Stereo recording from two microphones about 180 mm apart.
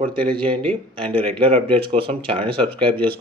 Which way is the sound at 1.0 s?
30° right (ahead or behind).